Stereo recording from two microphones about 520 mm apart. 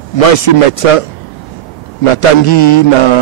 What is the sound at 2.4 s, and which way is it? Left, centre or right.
Mantra, left.